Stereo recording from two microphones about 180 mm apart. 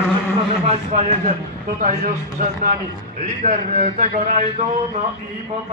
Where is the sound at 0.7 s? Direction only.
40° right (ahead or behind).